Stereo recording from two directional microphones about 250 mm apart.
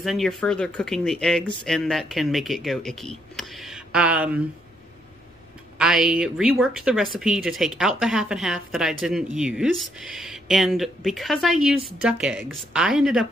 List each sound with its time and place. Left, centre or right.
0.0 s speech: centre
5.8 s speech: centre